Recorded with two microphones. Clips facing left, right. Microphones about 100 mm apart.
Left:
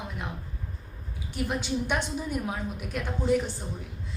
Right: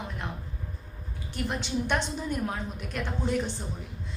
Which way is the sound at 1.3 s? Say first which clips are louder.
Left 1 dB; 5° left (ahead or behind).